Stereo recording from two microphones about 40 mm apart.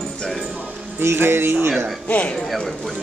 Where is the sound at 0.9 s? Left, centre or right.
Right.